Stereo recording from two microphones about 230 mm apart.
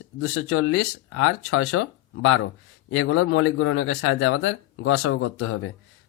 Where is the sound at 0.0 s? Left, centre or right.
Left.